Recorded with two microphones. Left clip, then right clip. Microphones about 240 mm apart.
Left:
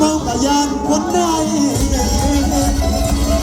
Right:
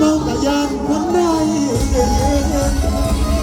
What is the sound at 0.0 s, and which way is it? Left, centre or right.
Music, left.